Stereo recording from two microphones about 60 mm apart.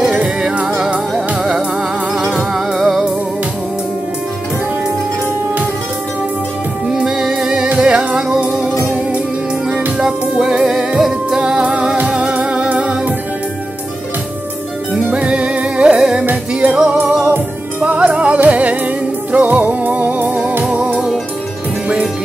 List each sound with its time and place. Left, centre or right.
0.0 s music: centre
6.9 s music: centre
9.7 s music: centre
15.0 s music: centre